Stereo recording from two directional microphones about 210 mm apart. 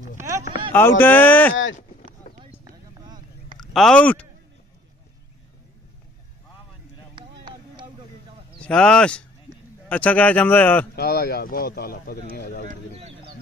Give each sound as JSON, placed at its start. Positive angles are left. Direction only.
{"t": 0.2, "sound": "a sound", "side_deg": -15}
{"t": 0.7, "sound": "a man's voice", "side_deg": 10}
{"t": 3.5, "sound": "speech", "side_deg": 0}
{"t": 7.2, "sound": "vehicle", "side_deg": -20}
{"t": 8.5, "sound": "a man's voice", "side_deg": 5}
{"t": 11.0, "sound": "speech", "side_deg": 50}
{"t": 12.6, "sound": "speech", "side_deg": -30}